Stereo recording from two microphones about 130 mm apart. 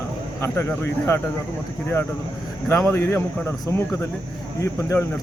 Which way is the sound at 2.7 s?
20° left (ahead or behind).